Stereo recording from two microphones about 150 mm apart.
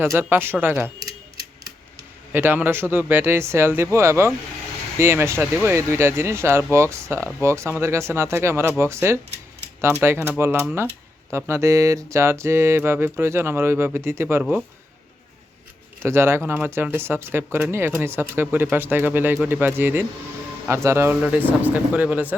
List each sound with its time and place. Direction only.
0.2 s speech: 15° right (ahead or behind)
2.3 s speech: 15° right (ahead or behind)
16.0 s speech: 15° right (ahead or behind)